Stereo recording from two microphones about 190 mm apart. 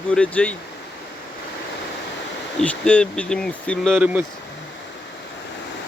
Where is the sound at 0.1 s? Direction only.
5° left (ahead or behind).